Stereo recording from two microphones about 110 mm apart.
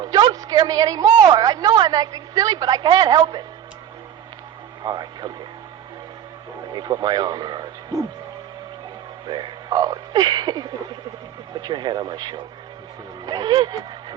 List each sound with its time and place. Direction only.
0.0 s a woman's voice: 40° right (ahead or behind)
4.8 s speech: 40° right (ahead or behind)
6.7 s a woman's voice: 40° right (ahead or behind)
9.2 s a woman's voice: 40° right (ahead or behind)